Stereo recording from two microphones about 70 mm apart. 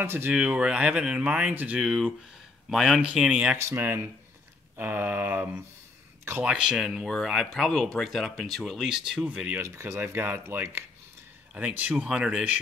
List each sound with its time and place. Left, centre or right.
0.0 s speech: right
0.3 s speech: centre
1.5 s a sound: right
1.8 s speech: centre
3.5 s speech: right
4.7 s a sound: right
6.4 s speech: centre
6.8 s speech: centre
8.7 s speech: centre
9.6 s speech: right
11.5 s speech: right